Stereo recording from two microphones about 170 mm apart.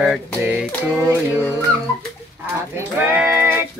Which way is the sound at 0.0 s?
5° right (ahead or behind).